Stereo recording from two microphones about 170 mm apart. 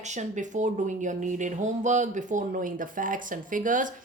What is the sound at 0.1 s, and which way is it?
Speech, 45° right (ahead or behind).